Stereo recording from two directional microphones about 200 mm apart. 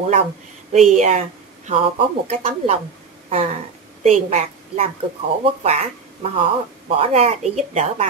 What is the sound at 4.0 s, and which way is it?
A woman's voice, 35° right (ahead or behind).